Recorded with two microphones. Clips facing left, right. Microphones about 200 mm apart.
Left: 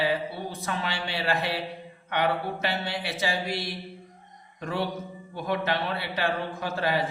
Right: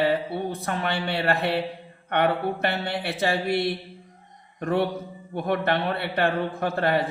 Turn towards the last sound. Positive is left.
turn(degrees=-60)  # may be behind; listen again after turning